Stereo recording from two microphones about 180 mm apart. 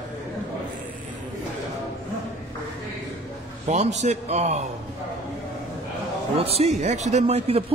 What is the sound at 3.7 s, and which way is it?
Speech, 40° right (ahead or behind).